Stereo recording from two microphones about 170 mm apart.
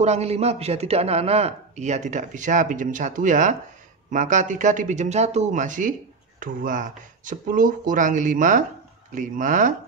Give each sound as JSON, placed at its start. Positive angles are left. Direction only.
{"t": 0.0, "sound": "a man's voice", "side_deg": -40}